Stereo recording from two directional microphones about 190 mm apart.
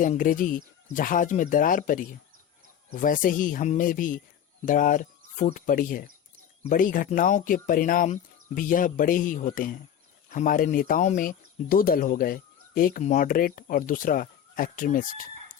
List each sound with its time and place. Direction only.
0.0 s speech: 45° left (ahead or behind)